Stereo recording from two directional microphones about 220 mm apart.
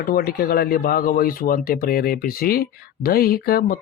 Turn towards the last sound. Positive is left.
turn(degrees=45)  # may be behind; listen again after turning